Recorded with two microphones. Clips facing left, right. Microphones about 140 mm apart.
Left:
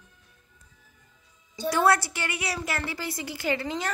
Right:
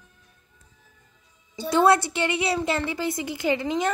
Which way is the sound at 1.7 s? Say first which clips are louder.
Right 4 dB; 25° right (ahead or behind).